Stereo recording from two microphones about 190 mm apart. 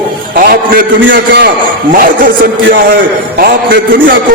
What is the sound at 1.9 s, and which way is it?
A man's voice, 50° right (ahead or behind).